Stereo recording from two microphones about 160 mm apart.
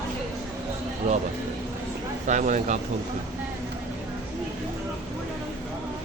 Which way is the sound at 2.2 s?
50° right (ahead or behind).